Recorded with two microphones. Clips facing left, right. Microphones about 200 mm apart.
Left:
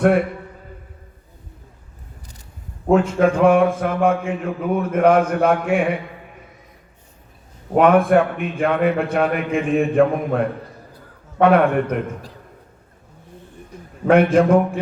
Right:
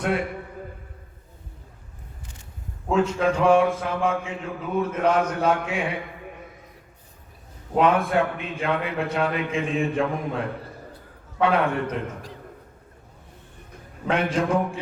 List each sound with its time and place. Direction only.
2.9 s mantra: 55° left (ahead or behind)
7.8 s mantra: 55° left (ahead or behind)
14.1 s mantra: 55° left (ahead or behind)